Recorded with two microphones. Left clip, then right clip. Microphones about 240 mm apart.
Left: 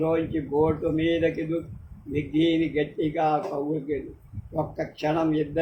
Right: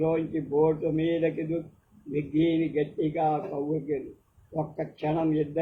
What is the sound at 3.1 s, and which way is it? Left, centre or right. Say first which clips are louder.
Speech: left 3 dB; left.